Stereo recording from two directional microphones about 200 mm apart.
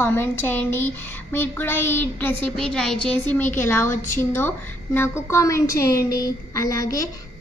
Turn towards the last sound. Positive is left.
turn(degrees=15)  # may be behind; listen again after turning